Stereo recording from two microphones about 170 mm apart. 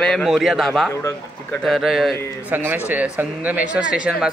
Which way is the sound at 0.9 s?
15° left (ahead or behind).